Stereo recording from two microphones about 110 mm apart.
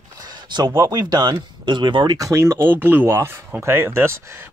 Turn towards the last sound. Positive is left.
turn(degrees=-20)  # may be behind; listen again after turning